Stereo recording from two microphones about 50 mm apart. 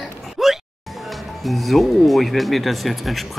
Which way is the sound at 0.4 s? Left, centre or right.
Centre.